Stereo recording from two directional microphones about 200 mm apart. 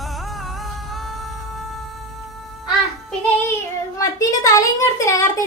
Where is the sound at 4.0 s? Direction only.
15° left (ahead or behind).